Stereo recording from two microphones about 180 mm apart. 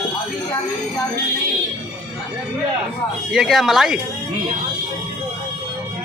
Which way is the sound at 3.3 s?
Centre (ahead or behind).